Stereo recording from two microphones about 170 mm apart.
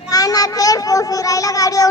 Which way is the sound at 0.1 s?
20° left (ahead or behind).